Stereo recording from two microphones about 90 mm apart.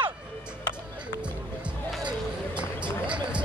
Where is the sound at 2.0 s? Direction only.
10° right (ahead or behind).